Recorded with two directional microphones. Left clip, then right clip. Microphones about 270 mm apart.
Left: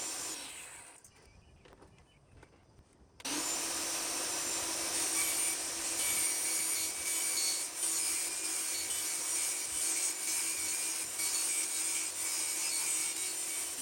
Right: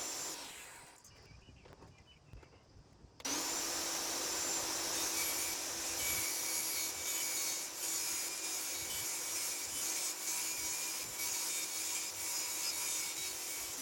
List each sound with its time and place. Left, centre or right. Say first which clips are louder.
3.2 s vacuum cleaner: left 1 dB; centre